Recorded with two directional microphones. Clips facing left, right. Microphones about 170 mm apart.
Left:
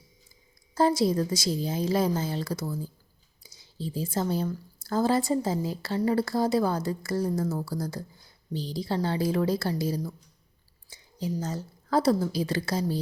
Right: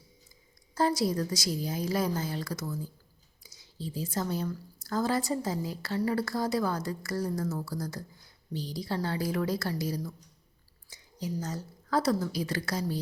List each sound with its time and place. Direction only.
0.7 s a woman's voice: 25° left (ahead or behind)